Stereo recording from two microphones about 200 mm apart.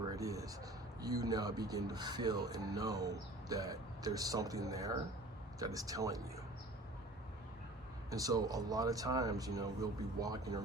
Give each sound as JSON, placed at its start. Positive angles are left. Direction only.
{"t": 0.1, "sound": "speech", "side_deg": -15}
{"t": 8.1, "sound": "speech", "side_deg": -15}